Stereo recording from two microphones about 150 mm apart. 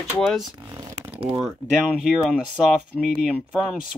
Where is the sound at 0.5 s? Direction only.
25° right (ahead or behind).